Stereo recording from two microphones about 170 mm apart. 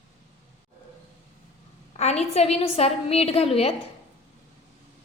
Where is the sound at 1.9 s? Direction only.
40° left (ahead or behind).